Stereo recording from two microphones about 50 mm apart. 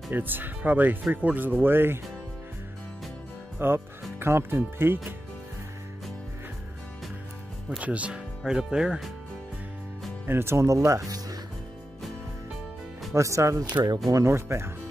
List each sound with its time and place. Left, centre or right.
0.1 s speech: right
3.5 s speech: right
7.8 s speech: right
8.5 s speech: centre
10.2 s speech: right
13.1 s speech: right
13.9 s speech: right